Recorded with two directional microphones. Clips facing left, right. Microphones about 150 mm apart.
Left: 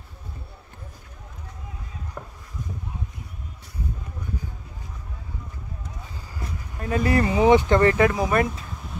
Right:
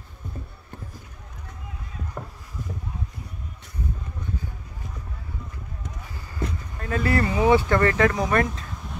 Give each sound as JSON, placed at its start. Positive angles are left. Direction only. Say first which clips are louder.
{"t": 6.8, "sound": "speech", "louder": "left 2 dB", "side_deg": 15}